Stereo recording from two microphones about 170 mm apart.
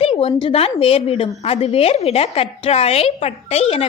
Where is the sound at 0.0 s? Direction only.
35° left (ahead or behind).